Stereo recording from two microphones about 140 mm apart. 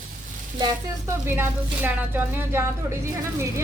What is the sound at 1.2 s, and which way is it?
A woman's voice, 15° right (ahead or behind).